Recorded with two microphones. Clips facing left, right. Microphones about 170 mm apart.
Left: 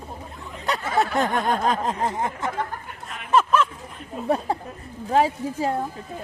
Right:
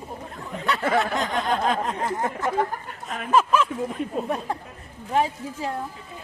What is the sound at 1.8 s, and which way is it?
Speech, 35° left (ahead or behind).